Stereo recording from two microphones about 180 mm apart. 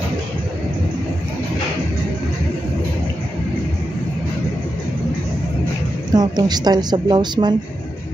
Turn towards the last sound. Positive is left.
turn(degrees=-25)  # may be behind; listen again after turning